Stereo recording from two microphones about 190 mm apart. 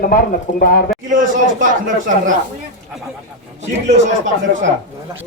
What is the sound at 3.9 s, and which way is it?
Speech, 35° right (ahead or behind).